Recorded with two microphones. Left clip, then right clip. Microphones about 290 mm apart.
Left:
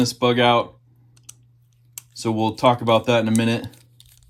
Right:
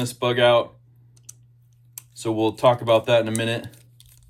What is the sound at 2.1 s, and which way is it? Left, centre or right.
Speech, centre.